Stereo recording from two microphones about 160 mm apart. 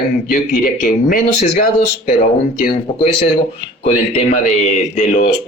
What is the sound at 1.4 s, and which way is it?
Speech, 45° left (ahead or behind).